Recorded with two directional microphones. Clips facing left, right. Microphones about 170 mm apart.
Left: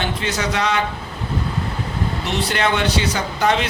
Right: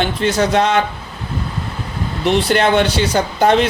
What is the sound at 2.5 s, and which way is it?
Speech, 50° right (ahead or behind).